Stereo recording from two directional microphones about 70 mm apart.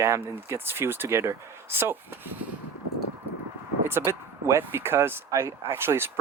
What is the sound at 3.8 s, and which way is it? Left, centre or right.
Speech, right.